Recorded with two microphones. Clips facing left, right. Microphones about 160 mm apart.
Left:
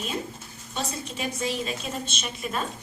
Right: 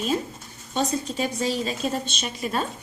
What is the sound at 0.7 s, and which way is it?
A woman's voice, 35° right (ahead or behind).